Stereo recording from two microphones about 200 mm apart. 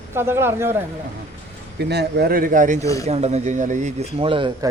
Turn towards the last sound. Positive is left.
turn(degrees=-25)  # may be behind; listen again after turning